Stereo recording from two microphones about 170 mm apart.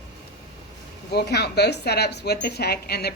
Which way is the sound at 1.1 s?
75° left (ahead or behind).